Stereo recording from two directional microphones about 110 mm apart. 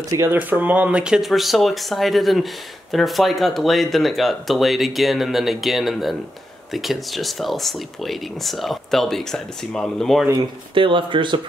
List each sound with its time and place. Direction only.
0.1 s speech: 25° right (ahead or behind); by 10.2 s 5° left (ahead or behind)
10.7 s speech: 50° right (ahead or behind)